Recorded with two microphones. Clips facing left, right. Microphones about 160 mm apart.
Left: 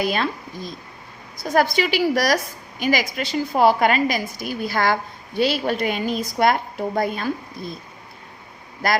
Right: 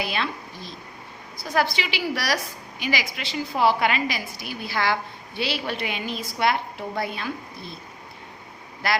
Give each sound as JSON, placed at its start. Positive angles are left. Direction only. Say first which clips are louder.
{"t": 0.0, "sound": "a woman's voice", "louder": "left 5 dB", "side_deg": 45}
{"t": 8.8, "sound": "a woman's voice", "louder": "left 4 dB", "side_deg": 45}